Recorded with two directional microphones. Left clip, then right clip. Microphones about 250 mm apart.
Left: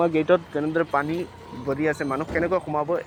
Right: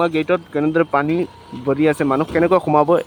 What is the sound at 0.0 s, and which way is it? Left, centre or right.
Speech, centre.